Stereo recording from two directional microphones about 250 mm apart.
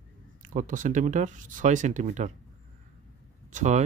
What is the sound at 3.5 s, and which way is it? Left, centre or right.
Speech, right.